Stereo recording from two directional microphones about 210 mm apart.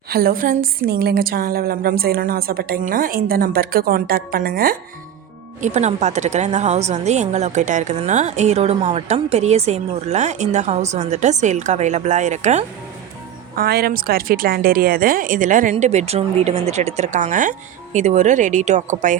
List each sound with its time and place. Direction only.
0.1 s a woman's voice: 45° right (ahead or behind)
5.6 s a woman's voice: 35° right (ahead or behind)
13.6 s a woman's voice: 45° right (ahead or behind)